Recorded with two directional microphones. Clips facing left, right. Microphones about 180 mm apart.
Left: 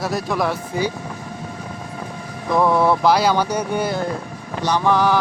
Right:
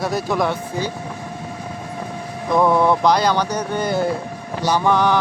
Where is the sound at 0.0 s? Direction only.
Centre (ahead or behind).